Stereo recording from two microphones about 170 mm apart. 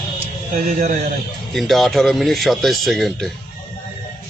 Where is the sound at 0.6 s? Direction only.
50° right (ahead or behind).